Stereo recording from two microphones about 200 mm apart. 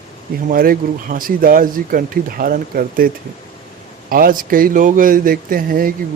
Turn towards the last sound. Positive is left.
turn(degrees=-45)  # may be behind; listen again after turning